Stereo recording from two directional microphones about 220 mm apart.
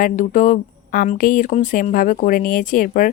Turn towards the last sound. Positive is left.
turn(degrees=40)  # may be behind; listen again after turning